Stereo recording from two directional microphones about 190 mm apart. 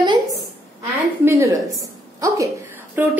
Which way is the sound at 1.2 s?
15° right (ahead or behind).